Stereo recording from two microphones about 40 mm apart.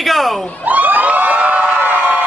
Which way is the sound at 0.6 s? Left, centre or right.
Right.